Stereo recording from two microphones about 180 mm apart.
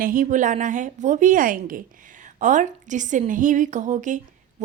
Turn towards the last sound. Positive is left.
turn(degrees=-45)  # may be behind; listen again after turning